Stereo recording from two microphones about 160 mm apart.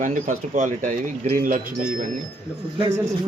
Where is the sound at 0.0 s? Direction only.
50° right (ahead or behind).